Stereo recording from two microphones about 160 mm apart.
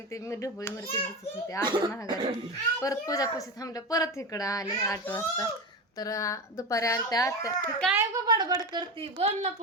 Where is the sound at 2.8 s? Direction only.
20° left (ahead or behind).